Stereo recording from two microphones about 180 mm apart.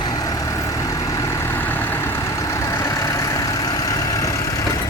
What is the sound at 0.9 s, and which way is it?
Vehicle, 20° left (ahead or behind).